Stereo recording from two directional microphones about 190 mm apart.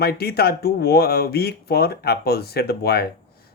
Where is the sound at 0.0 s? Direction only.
55° left (ahead or behind).